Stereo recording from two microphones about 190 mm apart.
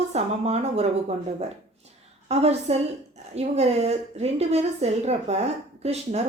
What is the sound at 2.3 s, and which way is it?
A woman's voice, 35° right (ahead or behind).